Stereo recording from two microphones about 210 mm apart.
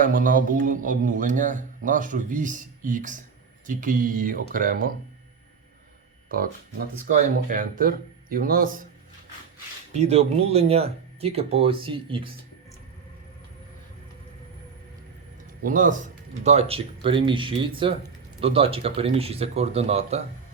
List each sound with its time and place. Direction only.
0.0 s a man's voice: 40° right (ahead or behind)
7.1 s a man's voice: 40° right (ahead or behind)
9.9 s speech: 30° right (ahead or behind)
15.6 s a man's voice: 40° right (ahead or behind)